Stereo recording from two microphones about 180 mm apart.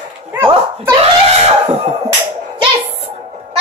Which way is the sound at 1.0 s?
35° right (ahead or behind).